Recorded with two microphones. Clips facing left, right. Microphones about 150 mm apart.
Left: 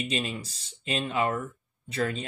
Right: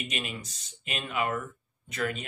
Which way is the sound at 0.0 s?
30° left (ahead or behind).